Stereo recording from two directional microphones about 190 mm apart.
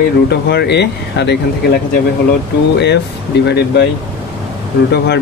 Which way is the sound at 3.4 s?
60° left (ahead or behind).